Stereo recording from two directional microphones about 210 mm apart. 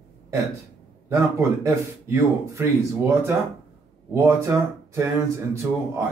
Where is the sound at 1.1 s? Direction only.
15° right (ahead or behind).